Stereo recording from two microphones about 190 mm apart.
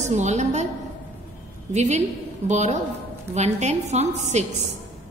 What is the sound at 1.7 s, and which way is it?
A woman's voice, 35° right (ahead or behind).